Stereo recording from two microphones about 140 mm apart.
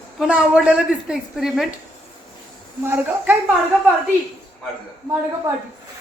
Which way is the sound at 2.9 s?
15° right (ahead or behind).